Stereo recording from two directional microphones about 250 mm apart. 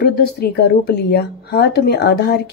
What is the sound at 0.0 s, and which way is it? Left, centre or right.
A woman's voice, left.